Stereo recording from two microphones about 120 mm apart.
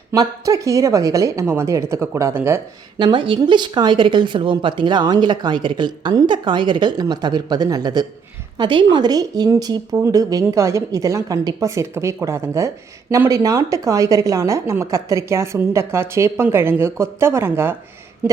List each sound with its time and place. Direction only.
0.1 s a woman's voice: 25° right (ahead or behind)
3.0 s a woman's voice: 40° right (ahead or behind); by 17.7 s 20° right (ahead or behind)